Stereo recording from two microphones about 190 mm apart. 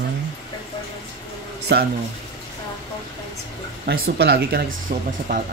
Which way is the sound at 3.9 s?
60° right (ahead or behind).